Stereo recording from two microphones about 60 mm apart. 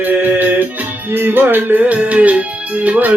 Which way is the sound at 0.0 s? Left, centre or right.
Right.